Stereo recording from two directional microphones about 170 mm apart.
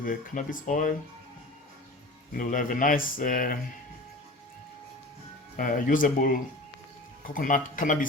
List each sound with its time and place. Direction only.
0.0 s speech: 55° left (ahead or behind)
2.3 s speech: 55° left (ahead or behind)
5.5 s speech: 50° left (ahead or behind)